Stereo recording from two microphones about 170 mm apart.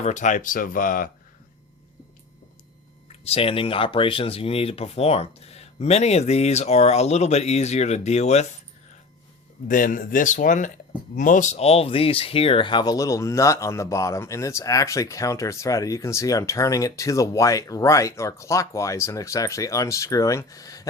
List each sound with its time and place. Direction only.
0.0 s speech: 45° left (ahead or behind)
3.1 s speech: 35° left (ahead or behind)
9.6 s speech: 55° left (ahead or behind); by 20.8 s 20° left (ahead or behind)